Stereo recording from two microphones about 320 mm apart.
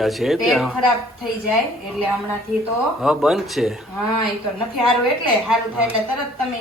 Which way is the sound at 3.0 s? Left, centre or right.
Centre.